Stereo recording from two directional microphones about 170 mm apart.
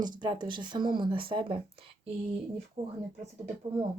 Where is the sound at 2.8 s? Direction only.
45° right (ahead or behind).